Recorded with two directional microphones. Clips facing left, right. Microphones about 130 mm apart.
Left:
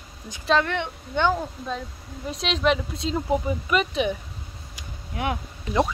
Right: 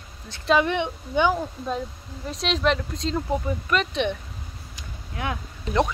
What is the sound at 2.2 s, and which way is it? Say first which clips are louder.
Speech: even; centre (ahead or behind).